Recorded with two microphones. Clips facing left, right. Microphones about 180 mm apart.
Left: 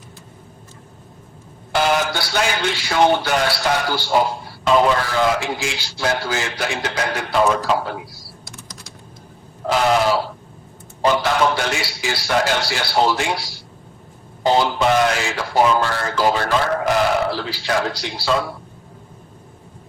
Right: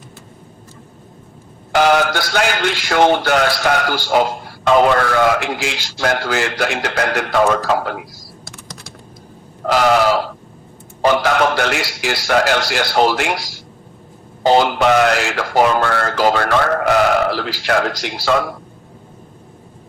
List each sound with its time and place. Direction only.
1.7 s speech: 65° right (ahead or behind)
2.3 s a man's voice: 65° right (ahead or behind)
3.6 s speech: 55° right (ahead or behind)
7.3 s a man's voice: 50° right (ahead or behind)
9.6 s speech: 70° right (ahead or behind)
11.1 s a man's voice: 70° right (ahead or behind)